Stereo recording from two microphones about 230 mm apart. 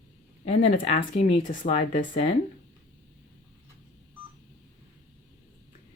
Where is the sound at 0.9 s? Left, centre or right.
Left.